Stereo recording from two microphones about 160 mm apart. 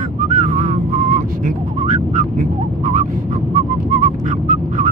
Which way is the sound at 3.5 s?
50° right (ahead or behind).